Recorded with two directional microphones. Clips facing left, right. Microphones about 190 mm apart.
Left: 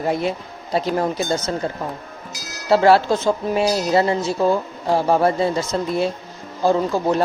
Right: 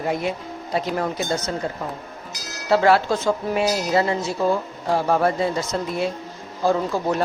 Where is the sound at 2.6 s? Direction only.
30° left (ahead or behind).